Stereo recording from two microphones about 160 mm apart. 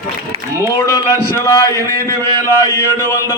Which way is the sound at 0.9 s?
20° left (ahead or behind).